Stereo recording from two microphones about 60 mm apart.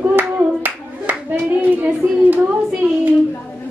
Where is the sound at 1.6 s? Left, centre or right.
Right.